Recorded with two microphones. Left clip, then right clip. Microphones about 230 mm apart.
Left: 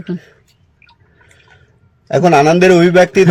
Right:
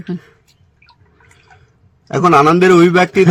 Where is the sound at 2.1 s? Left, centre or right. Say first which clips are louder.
Even; centre.